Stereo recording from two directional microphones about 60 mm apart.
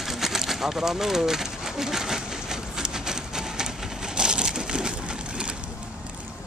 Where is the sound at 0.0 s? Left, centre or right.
Centre.